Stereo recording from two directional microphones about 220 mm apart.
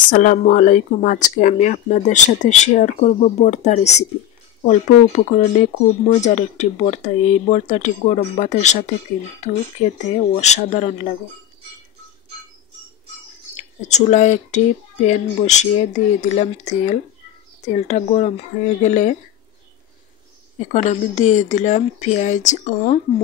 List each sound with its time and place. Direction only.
0.1 s speech: 35° left (ahead or behind)
13.6 s speech: 30° left (ahead or behind)
20.5 s speech: 30° left (ahead or behind)